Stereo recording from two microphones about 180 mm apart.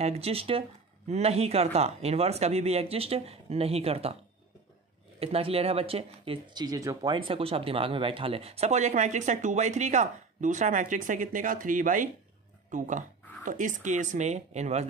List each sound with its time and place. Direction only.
0.0 s speech: 35° right (ahead or behind)
5.2 s speech: 35° right (ahead or behind)